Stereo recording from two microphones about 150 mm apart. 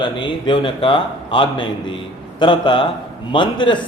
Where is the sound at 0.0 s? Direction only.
30° left (ahead or behind).